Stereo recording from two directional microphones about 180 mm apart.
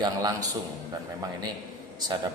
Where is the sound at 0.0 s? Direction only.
20° right (ahead or behind).